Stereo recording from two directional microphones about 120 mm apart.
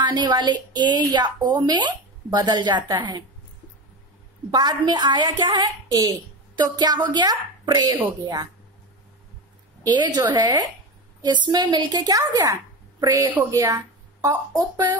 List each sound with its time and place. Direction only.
0.0 s a woman's voice: 40° right (ahead or behind)
4.5 s a woman's voice: 35° right (ahead or behind)
9.8 s a woman's voice: 35° right (ahead or behind)